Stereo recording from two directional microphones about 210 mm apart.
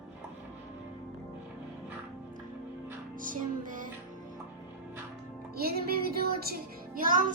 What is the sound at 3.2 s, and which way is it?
Music, 40° right (ahead or behind).